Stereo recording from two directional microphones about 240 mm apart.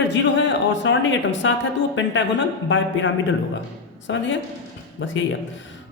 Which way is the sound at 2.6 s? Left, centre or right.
Left.